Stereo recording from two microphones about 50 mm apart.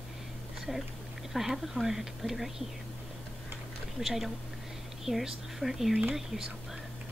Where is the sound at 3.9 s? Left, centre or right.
Centre.